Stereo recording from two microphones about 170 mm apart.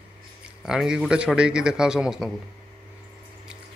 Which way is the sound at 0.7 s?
5° right (ahead or behind).